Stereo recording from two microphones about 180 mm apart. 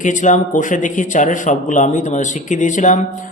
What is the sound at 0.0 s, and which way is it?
Speech, 45° left (ahead or behind).